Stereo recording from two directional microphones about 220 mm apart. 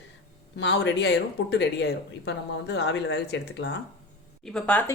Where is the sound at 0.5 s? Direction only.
50° left (ahead or behind).